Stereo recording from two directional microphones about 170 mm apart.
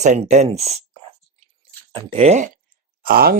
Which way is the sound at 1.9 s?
35° right (ahead or behind).